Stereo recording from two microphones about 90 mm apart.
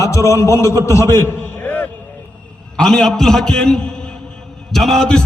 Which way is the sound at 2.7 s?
10° left (ahead or behind).